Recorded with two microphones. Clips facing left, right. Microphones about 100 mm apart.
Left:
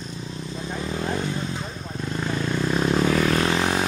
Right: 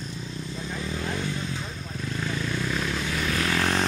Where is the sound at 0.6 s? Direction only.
30° left (ahead or behind).